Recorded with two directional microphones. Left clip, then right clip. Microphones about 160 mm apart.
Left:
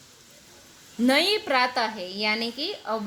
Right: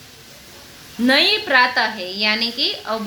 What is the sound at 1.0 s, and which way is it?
A woman's voice, 90° left.